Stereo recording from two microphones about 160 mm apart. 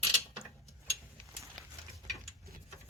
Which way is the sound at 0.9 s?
20° right (ahead or behind).